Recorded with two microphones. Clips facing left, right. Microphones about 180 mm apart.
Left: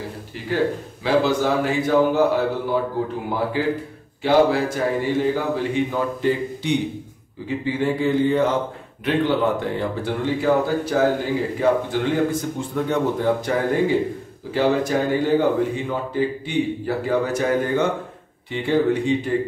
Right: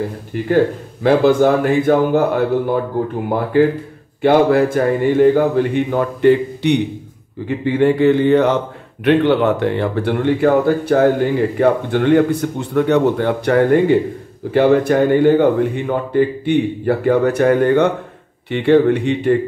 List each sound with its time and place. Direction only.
1.0 s a man's voice: 55° right (ahead or behind)